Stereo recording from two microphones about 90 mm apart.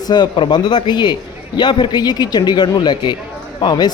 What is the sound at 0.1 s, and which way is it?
Speech, 60° left (ahead or behind).